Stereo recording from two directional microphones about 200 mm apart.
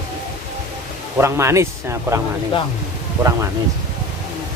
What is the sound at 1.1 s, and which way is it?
Speech, 15° right (ahead or behind).